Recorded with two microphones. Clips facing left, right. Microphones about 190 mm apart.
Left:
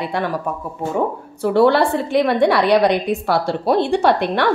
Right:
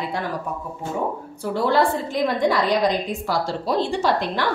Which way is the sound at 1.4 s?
70° left (ahead or behind).